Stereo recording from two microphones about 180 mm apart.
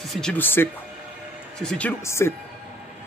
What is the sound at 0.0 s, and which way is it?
Speech, centre (ahead or behind).